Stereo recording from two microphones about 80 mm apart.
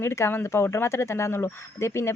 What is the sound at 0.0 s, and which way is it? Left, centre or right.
Speech, left.